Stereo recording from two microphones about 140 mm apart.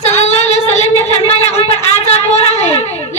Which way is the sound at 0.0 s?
50° left (ahead or behind).